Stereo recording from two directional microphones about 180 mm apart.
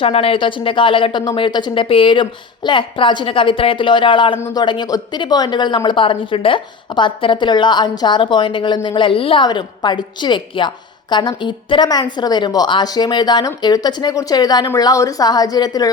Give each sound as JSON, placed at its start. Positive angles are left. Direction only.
{"t": 0.0, "sound": "a woman's voice", "side_deg": 30}
{"t": 4.4, "sound": "speech", "side_deg": 15}
{"t": 4.6, "sound": "a woman's voice", "side_deg": 25}